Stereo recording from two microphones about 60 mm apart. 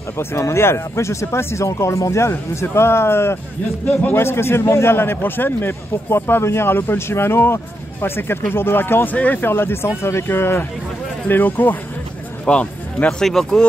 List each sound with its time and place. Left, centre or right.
0.4 s a man's voice: left
9.1 s speech: left
9.4 s a man's voice: left
11.2 s a man's voice: left
12.4 s speech: centre
13.2 s speech: centre